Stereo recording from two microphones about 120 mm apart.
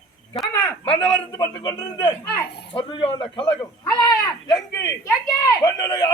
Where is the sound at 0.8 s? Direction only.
55° left (ahead or behind).